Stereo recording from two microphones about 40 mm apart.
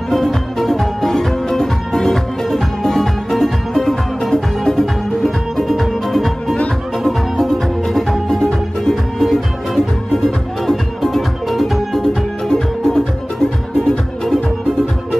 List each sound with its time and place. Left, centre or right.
0.1 s music: centre
12.1 s music: centre